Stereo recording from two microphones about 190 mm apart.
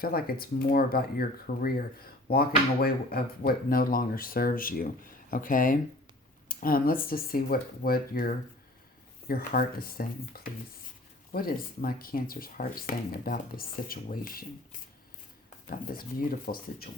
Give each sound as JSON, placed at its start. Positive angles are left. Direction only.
{"t": 0.0, "sound": "speech", "side_deg": 50}